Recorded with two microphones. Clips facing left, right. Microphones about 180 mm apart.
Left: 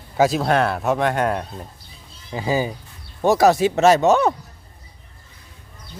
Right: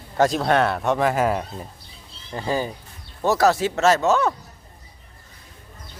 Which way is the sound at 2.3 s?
5° left (ahead or behind).